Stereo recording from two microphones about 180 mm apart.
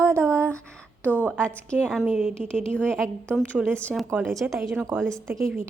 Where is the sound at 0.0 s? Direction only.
15° right (ahead or behind).